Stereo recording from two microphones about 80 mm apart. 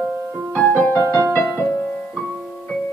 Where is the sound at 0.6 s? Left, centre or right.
Centre.